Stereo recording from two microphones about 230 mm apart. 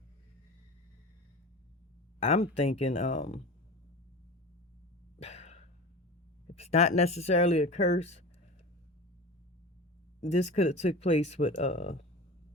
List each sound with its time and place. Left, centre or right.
2.2 s speech: left
5.2 s throat clearing: left
6.5 s speech: left
10.2 s speech: left